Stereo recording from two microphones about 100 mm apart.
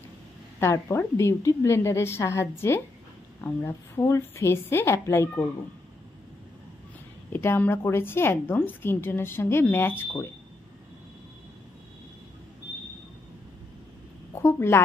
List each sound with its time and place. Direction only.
0.6 s a woman's voice: 25° left (ahead or behind)
7.3 s a woman's voice: 20° left (ahead or behind)
14.3 s a woman's voice: 25° left (ahead or behind)